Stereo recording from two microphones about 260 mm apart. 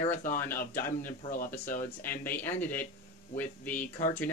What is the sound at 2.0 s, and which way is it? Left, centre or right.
Speech, centre.